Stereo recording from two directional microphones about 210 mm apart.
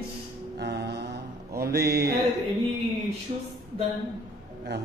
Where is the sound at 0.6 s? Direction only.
55° right (ahead or behind).